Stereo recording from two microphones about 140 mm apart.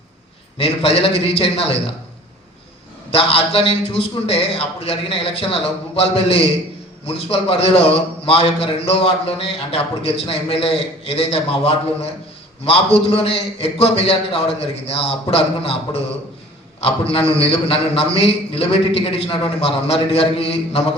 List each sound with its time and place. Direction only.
0.6 s a man's voice: 45° left (ahead or behind)
3.1 s a man's voice: 40° left (ahead or behind)